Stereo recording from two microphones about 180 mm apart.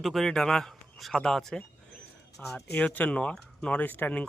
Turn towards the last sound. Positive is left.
turn(degrees=10)  # may be behind; listen again after turning